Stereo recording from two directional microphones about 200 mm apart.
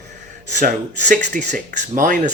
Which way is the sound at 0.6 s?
40° right (ahead or behind).